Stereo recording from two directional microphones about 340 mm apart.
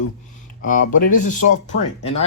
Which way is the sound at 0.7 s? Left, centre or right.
Left.